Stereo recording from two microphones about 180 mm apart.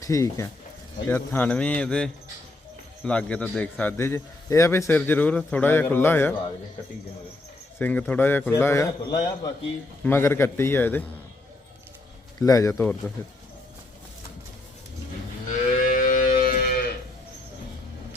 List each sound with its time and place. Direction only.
0.0 s a man's voice: 15° left (ahead or behind)
7.8 s a man's voice: 10° left (ahead or behind)
12.4 s a man's voice: 20° left (ahead or behind)
15.8 s livestock: 50° left (ahead or behind)
16.5 s moo: 50° left (ahead or behind)